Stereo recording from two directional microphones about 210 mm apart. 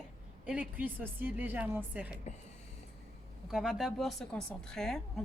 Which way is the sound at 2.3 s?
35° left (ahead or behind).